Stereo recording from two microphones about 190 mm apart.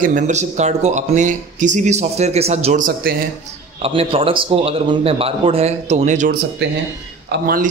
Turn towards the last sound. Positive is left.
turn(degrees=-50)  # may be behind; listen again after turning